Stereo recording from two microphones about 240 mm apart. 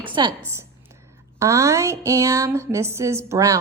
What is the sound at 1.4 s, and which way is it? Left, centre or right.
Speech, centre.